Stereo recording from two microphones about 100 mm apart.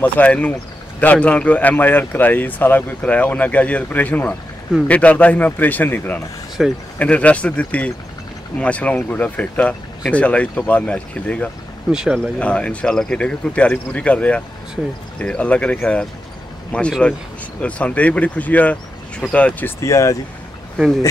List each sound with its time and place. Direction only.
0.0 s speech: 15° left (ahead or behind)
6.6 s speech: centre (ahead or behind)
7.0 s speech: 15° left (ahead or behind)
11.9 s speech: 5° right (ahead or behind)
12.4 s speech: 10° left (ahead or behind)
19.8 s speech: 30° left (ahead or behind)